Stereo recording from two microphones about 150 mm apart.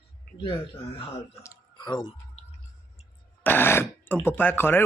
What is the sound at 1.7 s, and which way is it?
Speech, 30° left (ahead or behind).